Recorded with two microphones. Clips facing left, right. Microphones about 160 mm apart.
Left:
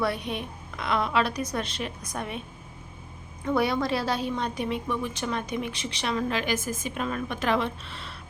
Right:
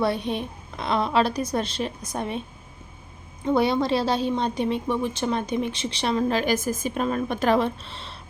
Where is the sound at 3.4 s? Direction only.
25° right (ahead or behind).